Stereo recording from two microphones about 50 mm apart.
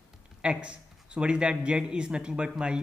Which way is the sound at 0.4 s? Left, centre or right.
Right.